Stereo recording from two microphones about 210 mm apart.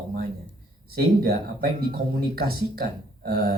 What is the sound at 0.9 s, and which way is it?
Speech, 45° right (ahead or behind).